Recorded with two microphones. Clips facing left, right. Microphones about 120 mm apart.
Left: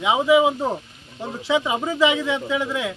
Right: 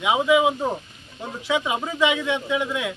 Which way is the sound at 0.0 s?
25° left (ahead or behind).